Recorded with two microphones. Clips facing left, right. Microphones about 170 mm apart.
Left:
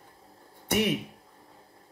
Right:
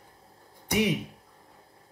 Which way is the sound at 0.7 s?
15° right (ahead or behind).